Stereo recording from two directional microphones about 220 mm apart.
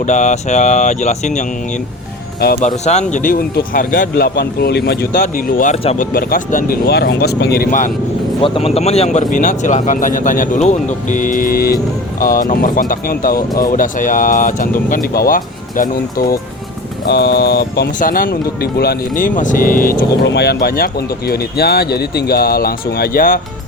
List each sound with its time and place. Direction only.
0.1 s speech: 35° left (ahead or behind)
2.6 s speech: 30° left (ahead or behind); by 5.2 s 45° left (ahead or behind)
5.2 s speech: 35° left (ahead or behind)
6.1 s speech: 40° left (ahead or behind)
8.4 s speech: 25° left (ahead or behind); by 15.4 s 40° left (ahead or behind)
17.1 s speech: 50° left (ahead or behind)
20.2 s speech: 50° left (ahead or behind)